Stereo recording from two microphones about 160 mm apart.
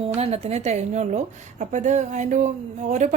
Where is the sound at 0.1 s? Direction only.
40° right (ahead or behind).